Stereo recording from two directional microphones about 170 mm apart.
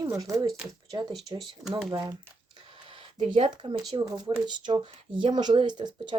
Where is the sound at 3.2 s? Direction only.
30° right (ahead or behind).